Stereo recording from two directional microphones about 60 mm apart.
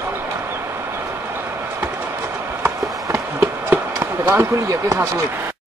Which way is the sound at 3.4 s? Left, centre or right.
Right.